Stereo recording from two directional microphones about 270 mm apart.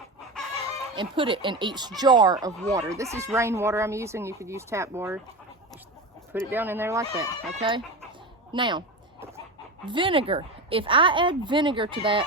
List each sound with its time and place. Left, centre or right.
0.9 s speech: centre
6.3 s a woman's voice: centre
9.8 s a woman's voice: centre